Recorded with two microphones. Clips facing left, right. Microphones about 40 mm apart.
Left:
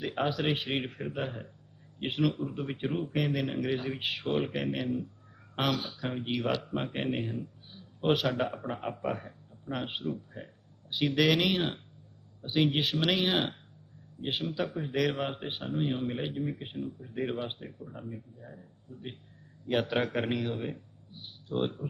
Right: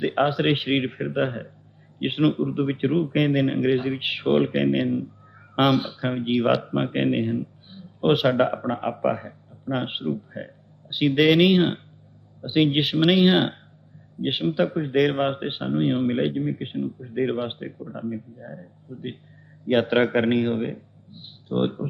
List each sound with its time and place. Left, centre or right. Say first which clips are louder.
0.0 s a man's voice: right 9 dB; right